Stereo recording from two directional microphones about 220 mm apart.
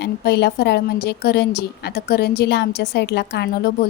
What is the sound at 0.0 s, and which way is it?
A woman's voice, 50° left (ahead or behind).